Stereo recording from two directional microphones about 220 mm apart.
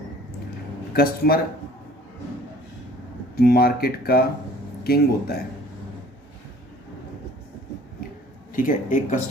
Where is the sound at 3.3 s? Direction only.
45° left (ahead or behind).